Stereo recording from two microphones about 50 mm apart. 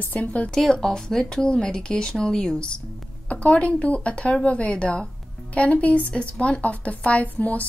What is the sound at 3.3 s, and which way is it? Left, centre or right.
Speech, left.